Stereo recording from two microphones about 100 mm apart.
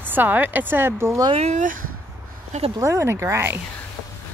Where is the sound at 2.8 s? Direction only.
30° right (ahead or behind).